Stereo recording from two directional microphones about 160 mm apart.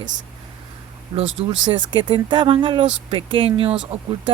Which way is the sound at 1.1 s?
35° right (ahead or behind).